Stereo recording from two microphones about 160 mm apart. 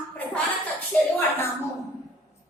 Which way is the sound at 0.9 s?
10° left (ahead or behind).